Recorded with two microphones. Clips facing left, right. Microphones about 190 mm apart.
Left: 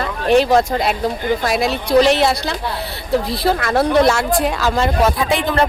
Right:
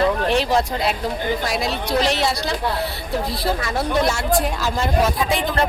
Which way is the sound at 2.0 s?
60° left (ahead or behind).